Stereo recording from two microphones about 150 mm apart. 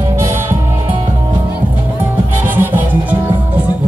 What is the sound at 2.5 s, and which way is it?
Music, 15° right (ahead or behind).